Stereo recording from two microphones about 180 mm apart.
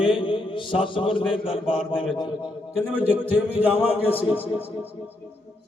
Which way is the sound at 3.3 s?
10° right (ahead or behind).